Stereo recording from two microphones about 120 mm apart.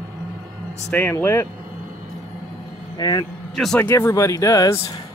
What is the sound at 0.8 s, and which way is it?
Speech, 15° left (ahead or behind).